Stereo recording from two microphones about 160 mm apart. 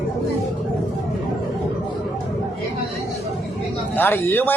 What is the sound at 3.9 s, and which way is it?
Speech, 10° left (ahead or behind).